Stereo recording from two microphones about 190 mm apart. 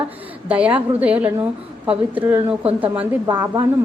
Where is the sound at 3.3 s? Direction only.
20° right (ahead or behind).